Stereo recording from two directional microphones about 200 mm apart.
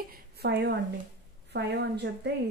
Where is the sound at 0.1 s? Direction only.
55° right (ahead or behind).